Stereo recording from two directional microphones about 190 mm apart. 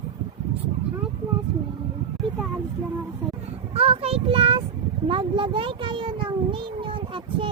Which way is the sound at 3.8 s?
30° right (ahead or behind).